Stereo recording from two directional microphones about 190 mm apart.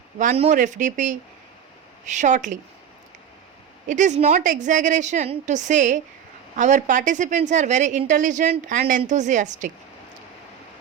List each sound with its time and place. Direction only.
0.3 s a woman's voice: 35° right (ahead or behind)
3.8 s a woman's voice: 40° right (ahead or behind)